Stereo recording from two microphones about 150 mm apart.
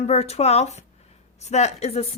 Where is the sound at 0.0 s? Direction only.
45° left (ahead or behind).